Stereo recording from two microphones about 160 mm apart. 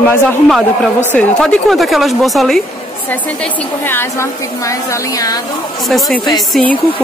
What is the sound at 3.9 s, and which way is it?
A woman's voice, 15° left (ahead or behind).